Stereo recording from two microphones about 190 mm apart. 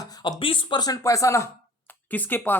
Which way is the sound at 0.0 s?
20° left (ahead or behind).